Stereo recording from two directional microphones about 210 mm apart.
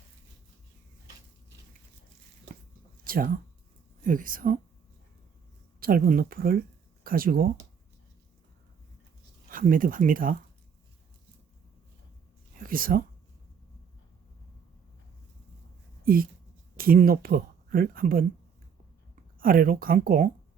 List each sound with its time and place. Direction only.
3.0 s a sound: 45° right (ahead or behind)
4.0 s speech: 40° right (ahead or behind)
5.8 s speech: 45° right (ahead or behind)
9.5 s speech: 40° right (ahead or behind)
12.5 s a sound: 40° right (ahead or behind)
16.0 s speech: 45° right (ahead or behind)
19.4 s speech: 40° right (ahead or behind)